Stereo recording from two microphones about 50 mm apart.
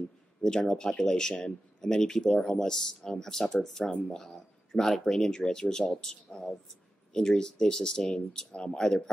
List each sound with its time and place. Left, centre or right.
0.4 s speech: centre
7.2 s speech: centre